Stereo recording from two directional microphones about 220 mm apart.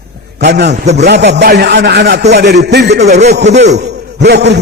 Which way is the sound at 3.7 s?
50° right (ahead or behind).